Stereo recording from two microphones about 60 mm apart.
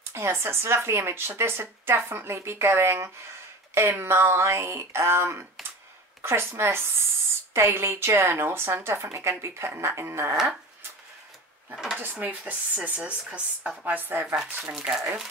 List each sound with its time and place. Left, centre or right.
0.1 s speech: right
11.7 s speech: centre
12.0 s speech: right
14.2 s speech: centre